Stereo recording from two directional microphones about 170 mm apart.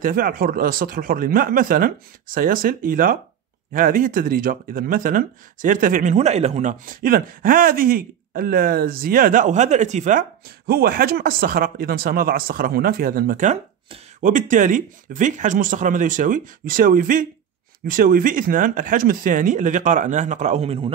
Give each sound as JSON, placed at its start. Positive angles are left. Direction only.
{"t": 0.0, "sound": "speech", "side_deg": -55}
{"t": 10.7, "sound": "speech", "side_deg": -60}